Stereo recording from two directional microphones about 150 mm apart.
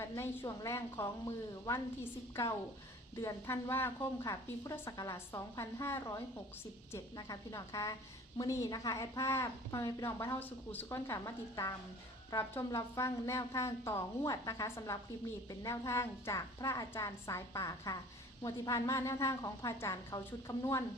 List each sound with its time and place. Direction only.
0.0 s a woman's voice: 20° left (ahead or behind)
3.2 s a woman's voice: 20° left (ahead or behind)